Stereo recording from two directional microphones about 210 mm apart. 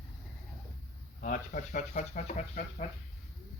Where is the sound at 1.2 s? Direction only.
40° left (ahead or behind).